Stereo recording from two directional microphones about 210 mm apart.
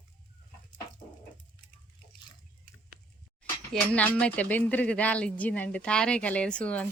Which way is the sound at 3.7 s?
5° left (ahead or behind).